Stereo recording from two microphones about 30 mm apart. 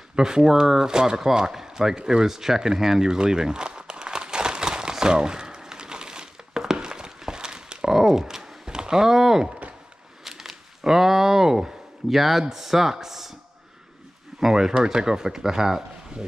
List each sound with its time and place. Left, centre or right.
0.1 s speech: right
2.0 s a sound: centre
5.0 s crumpling: right
6.9 s a sound: right
12.1 s speech: centre
14.4 s speech: centre